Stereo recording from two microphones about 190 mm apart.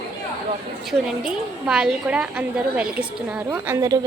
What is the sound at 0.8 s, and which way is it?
A woman's voice, centre (ahead or behind).